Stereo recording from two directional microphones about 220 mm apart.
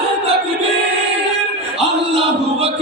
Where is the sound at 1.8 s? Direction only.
25° right (ahead or behind).